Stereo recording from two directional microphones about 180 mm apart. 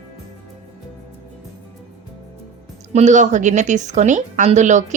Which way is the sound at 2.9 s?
40° right (ahead or behind).